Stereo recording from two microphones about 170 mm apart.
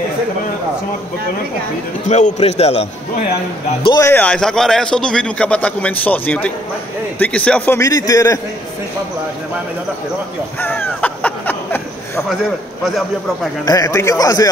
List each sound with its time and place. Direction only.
2.0 s a man's voice: 40° left (ahead or behind)
4.0 s a man's voice: 10° left (ahead or behind)
10.6 s a sound: 10° left (ahead or behind)
12.8 s a man's voice: centre (ahead or behind)
13.7 s a man's voice: 20° left (ahead or behind)